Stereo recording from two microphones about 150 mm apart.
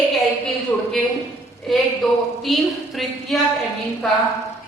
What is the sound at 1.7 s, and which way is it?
Speech, centre (ahead or behind).